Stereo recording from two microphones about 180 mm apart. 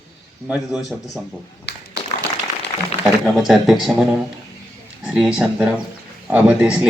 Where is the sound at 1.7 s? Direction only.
65° left (ahead or behind).